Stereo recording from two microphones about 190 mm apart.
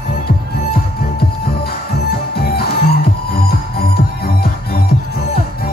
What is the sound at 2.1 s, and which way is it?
Music, 55° left (ahead or behind).